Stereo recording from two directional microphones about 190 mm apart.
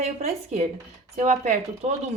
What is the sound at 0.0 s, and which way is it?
Speech, 35° right (ahead or behind).